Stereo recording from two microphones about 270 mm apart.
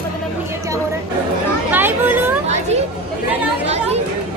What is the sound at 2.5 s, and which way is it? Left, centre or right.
Speech, right.